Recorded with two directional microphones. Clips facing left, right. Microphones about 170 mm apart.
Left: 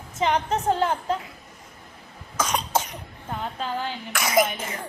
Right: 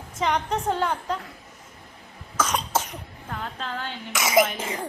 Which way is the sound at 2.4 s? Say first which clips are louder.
Even; 10° left (ahead or behind).